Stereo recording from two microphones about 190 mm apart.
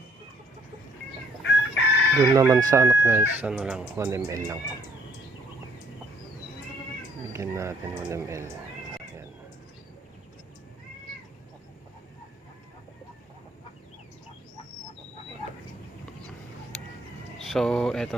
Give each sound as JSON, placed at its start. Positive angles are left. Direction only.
{"t": 1.4, "sound": "chicken", "side_deg": 75}
{"t": 2.3, "sound": "speech", "side_deg": -15}
{"t": 7.3, "sound": "speech", "side_deg": -15}
{"t": 17.4, "sound": "speech", "side_deg": 0}